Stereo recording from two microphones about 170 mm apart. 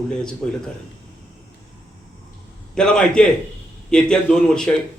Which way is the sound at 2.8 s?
5° left (ahead or behind).